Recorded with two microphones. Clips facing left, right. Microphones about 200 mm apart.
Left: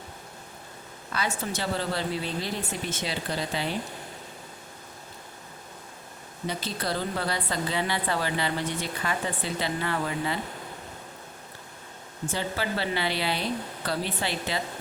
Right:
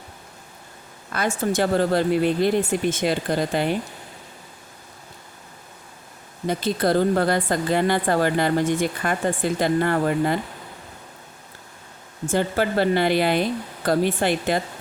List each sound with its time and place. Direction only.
1.1 s speech: 50° right (ahead or behind)
6.5 s speech: 50° right (ahead or behind)
12.3 s speech: 50° right (ahead or behind)